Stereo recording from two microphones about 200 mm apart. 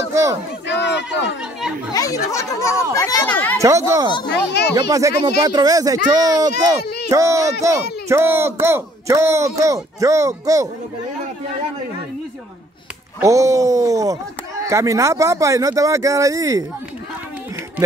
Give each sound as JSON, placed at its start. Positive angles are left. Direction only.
{"t": 0.1, "sound": "speech", "side_deg": -15}
{"t": 0.7, "sound": "a sound", "side_deg": 60}
{"t": 2.0, "sound": "a child's voice", "side_deg": 15}
{"t": 3.5, "sound": "speech", "side_deg": -15}
{"t": 4.3, "sound": "speech", "side_deg": 55}
{"t": 4.7, "sound": "speech", "side_deg": -20}
{"t": 6.8, "sound": "speech", "side_deg": 55}
{"t": 7.1, "sound": "speech", "side_deg": -15}
{"t": 13.2, "sound": "speech", "side_deg": -15}